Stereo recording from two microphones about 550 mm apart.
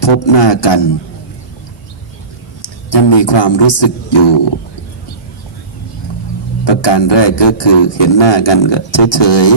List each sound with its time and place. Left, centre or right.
0.0 s speech: left
2.6 s a man's voice: left
6.7 s speech: left